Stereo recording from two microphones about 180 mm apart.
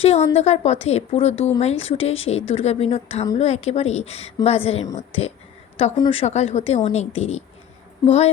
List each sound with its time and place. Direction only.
0.0 s a woman's voice: 35° left (ahead or behind)